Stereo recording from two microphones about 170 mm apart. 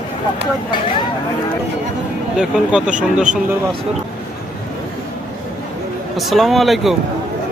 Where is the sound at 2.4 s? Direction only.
5° right (ahead or behind).